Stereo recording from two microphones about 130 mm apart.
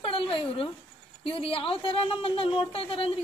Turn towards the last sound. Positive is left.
turn(degrees=45)  # may be behind; listen again after turning